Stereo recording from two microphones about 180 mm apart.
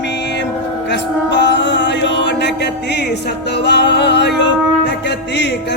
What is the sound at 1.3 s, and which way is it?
Mantra, 75° left (ahead or behind).